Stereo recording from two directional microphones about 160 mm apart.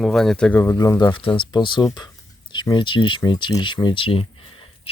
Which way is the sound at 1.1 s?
30° left (ahead or behind).